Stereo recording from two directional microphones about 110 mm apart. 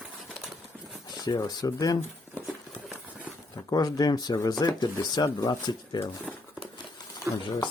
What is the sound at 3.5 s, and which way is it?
Speech, 35° left (ahead or behind).